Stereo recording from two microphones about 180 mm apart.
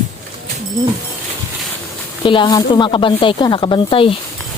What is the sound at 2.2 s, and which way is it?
Speech, 25° left (ahead or behind).